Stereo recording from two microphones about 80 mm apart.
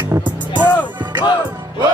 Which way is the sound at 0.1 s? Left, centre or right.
Right.